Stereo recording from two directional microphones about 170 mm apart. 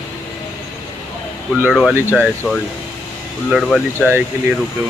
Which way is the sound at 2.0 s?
10° left (ahead or behind).